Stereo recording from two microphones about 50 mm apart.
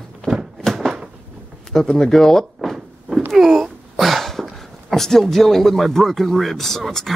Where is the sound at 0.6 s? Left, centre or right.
Centre.